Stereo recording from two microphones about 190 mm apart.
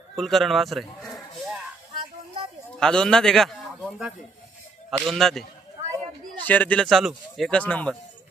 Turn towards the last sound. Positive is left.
turn(degrees=10)  # may be behind; listen again after turning